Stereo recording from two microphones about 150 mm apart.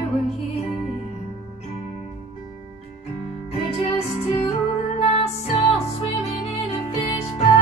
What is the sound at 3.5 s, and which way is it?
Music, 40° left (ahead or behind).